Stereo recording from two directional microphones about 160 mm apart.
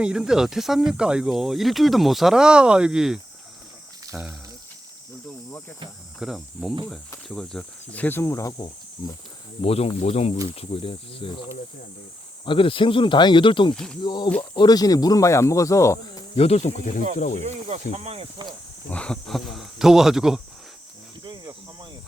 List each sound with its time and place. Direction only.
0.0 s speech: 5° right (ahead or behind)
6.1 s speech: centre (ahead or behind); by 8.5 s 20° left (ahead or behind)
8.5 s speech: 30° left (ahead or behind)
12.5 s speech: 35° left (ahead or behind)
13.7 s speech: 5° left (ahead or behind)
14.0 s speech: 30° left (ahead or behind)
16.3 s speech: 40° left (ahead or behind)
17.4 s speech: 45° right (ahead or behind)
18.9 s speech: 5° left (ahead or behind)
21.2 s cricket: 30° right (ahead or behind)